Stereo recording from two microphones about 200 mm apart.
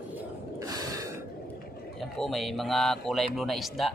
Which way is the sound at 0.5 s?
20° right (ahead or behind).